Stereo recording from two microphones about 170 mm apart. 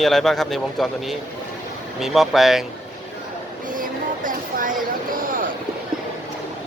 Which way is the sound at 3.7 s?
50° right (ahead or behind).